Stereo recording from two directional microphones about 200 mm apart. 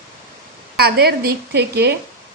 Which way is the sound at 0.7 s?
50° right (ahead or behind).